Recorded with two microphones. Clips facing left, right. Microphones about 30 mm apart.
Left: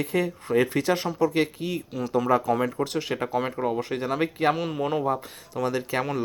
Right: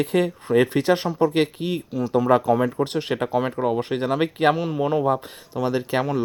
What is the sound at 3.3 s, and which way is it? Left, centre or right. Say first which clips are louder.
Speech: right 4 dB; centre.